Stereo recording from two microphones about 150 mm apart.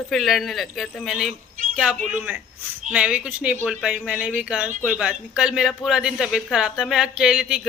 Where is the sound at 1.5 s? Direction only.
60° right (ahead or behind).